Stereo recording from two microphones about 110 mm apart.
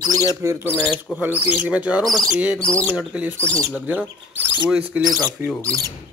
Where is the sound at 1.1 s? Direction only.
15° right (ahead or behind).